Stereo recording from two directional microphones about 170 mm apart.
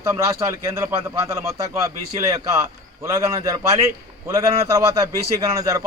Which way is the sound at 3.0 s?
20° right (ahead or behind).